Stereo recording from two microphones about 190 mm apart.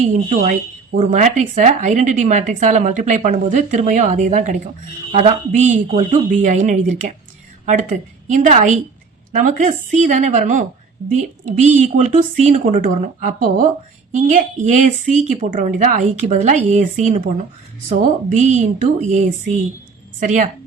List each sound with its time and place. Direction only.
0.0 s a woman's voice: 40° right (ahead or behind)